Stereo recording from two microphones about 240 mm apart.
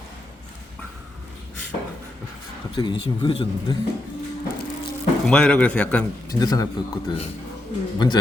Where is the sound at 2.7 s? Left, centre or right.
Centre.